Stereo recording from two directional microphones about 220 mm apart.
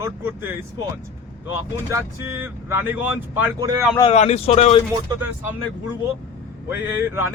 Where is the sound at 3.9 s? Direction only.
25° left (ahead or behind).